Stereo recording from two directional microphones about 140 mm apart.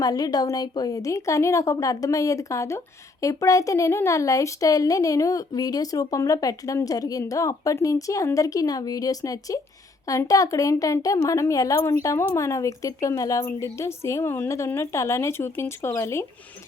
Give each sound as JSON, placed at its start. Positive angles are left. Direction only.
{"t": 0.0, "sound": "speech", "side_deg": 25}